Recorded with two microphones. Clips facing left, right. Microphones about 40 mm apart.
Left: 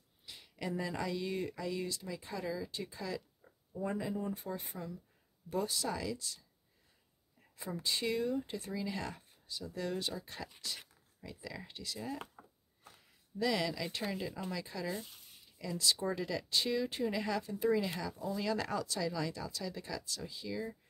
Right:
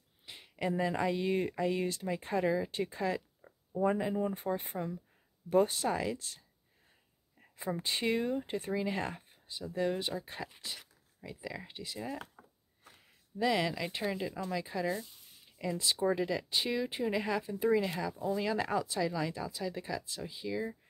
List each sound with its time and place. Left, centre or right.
0.2 s speech: right
3.4 s speech: right
7.5 s speech: right
12.4 s a sound: centre
12.8 s a sound: right
14.1 s speech: centre